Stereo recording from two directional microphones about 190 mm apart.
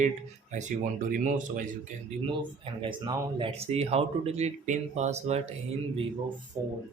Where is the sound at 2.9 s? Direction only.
25° right (ahead or behind).